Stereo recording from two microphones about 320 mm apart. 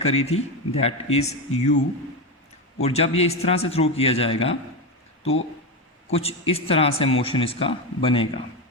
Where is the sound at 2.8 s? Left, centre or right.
Centre.